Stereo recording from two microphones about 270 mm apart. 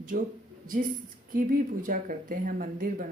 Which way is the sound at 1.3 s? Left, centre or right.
Right.